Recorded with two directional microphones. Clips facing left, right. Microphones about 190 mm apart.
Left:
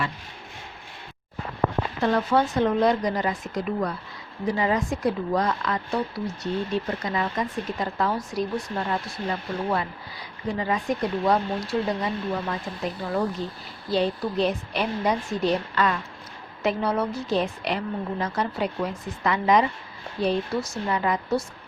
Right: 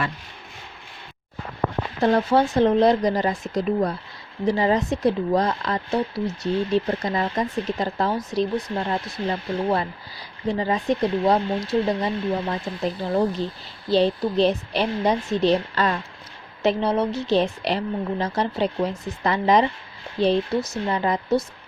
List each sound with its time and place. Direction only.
2.0 s speech: 30° right (ahead or behind)